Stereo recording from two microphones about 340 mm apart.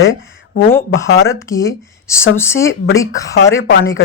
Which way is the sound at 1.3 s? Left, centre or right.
Centre.